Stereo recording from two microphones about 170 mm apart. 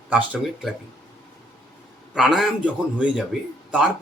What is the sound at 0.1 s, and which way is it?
Speech, 5° right (ahead or behind).